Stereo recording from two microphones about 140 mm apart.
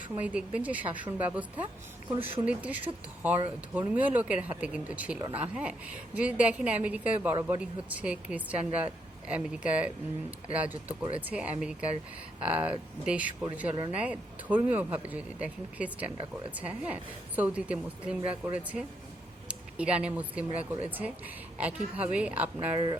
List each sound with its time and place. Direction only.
0.2 s a woman's voice: 10° right (ahead or behind)